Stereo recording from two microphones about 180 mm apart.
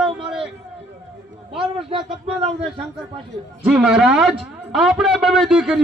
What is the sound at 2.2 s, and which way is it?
Speech, 30° right (ahead or behind).